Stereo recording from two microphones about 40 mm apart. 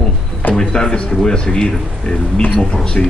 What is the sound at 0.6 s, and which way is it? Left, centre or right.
Speech, centre.